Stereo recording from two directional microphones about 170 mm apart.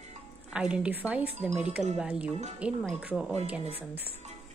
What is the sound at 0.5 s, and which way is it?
Speech, 5° right (ahead or behind).